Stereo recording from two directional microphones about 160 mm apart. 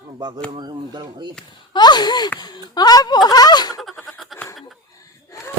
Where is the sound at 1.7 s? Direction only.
25° left (ahead or behind).